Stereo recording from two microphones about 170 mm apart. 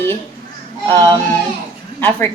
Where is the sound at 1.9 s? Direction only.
10° left (ahead or behind).